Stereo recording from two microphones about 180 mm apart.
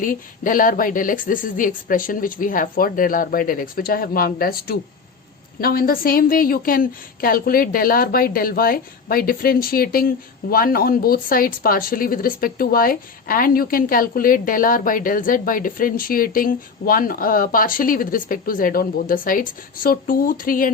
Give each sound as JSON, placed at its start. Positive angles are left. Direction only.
{"t": 0.0, "sound": "speech", "side_deg": 50}